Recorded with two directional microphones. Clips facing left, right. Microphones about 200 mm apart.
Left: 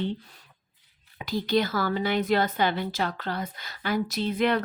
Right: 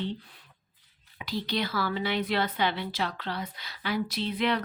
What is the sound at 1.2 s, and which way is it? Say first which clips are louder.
Speech: left 6 dB; 45° left (ahead or behind).